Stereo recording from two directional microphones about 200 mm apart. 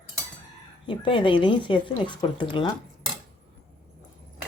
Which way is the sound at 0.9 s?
25° left (ahead or behind).